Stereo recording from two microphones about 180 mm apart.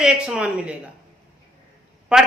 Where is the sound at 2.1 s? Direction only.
5° right (ahead or behind).